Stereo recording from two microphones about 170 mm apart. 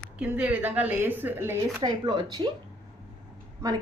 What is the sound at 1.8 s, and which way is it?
Speech, 25° right (ahead or behind).